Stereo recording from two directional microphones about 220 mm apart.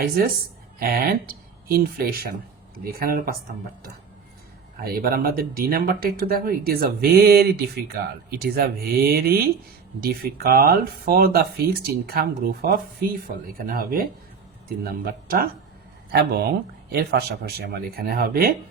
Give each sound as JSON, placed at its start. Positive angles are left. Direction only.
{"t": 0.8, "sound": "speech", "side_deg": -40}
{"t": 4.8, "sound": "speech", "side_deg": -45}
{"t": 16.9, "sound": "speech", "side_deg": -45}